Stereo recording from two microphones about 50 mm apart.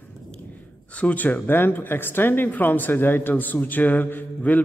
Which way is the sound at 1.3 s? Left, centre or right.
Left.